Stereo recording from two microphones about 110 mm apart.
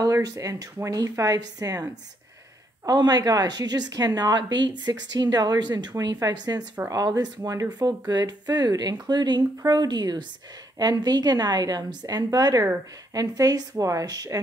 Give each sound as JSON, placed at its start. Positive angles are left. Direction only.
{"t": 0.0, "sound": "a woman's voice", "side_deg": -30}